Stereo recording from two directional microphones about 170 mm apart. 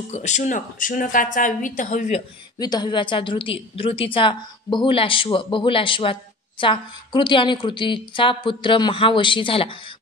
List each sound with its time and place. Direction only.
0.1 s a woman's voice: 45° left (ahead or behind)
2.6 s a woman's voice: 25° left (ahead or behind)